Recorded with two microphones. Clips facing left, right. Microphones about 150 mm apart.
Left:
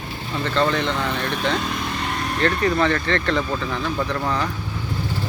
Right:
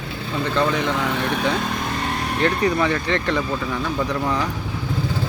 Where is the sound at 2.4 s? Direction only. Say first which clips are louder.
Even; 10° right (ahead or behind).